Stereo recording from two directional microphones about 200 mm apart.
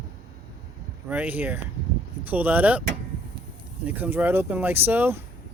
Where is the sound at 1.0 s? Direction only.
10° right (ahead or behind).